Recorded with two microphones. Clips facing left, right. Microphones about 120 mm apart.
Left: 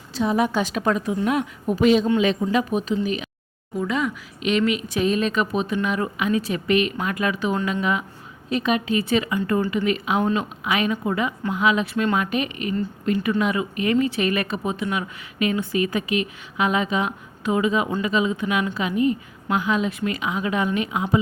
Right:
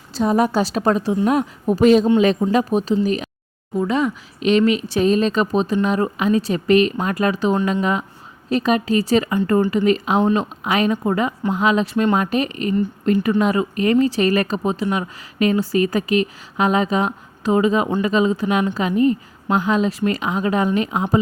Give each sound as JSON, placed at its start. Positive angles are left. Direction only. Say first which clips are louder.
{"t": 0.1, "sound": "speech", "louder": "right 4 dB", "side_deg": -40}